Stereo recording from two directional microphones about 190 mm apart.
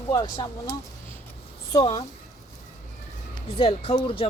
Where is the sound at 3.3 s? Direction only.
30° left (ahead or behind).